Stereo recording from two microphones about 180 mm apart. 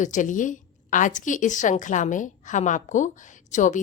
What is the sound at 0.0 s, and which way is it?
A woman's voice, 45° left (ahead or behind).